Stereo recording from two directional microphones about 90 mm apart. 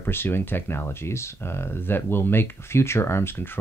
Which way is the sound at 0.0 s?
25° left (ahead or behind).